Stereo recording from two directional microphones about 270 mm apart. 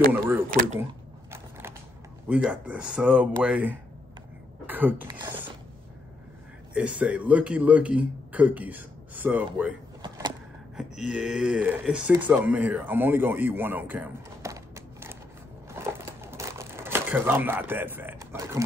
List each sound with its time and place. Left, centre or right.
0.1 s mechanisms: centre
2.2 s speech: centre
6.7 s speech: centre
10.0 s a sound: centre
10.8 s speech: centre
15.7 s crumpling: centre